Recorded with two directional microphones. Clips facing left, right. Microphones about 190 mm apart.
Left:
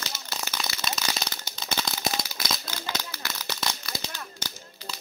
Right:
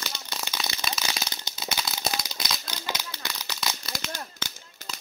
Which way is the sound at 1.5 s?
5° right (ahead or behind).